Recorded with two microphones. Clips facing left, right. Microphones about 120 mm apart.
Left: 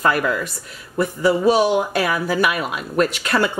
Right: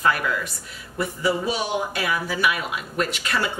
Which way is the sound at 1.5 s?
50° left (ahead or behind).